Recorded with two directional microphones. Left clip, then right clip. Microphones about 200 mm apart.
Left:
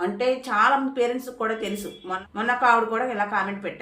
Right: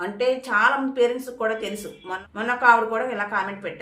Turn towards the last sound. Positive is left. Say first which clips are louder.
# even
turn(degrees=-5)  # may be behind; listen again after turning